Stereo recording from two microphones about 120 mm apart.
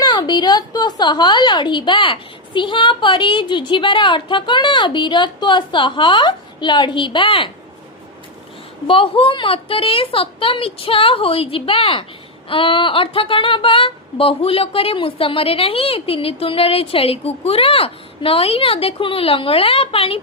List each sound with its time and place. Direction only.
0.0 s a woman's voice: 35° left (ahead or behind)
8.9 s speech: 50° left (ahead or behind)